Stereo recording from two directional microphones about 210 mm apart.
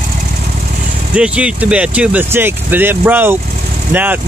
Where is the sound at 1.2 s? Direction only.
5° right (ahead or behind).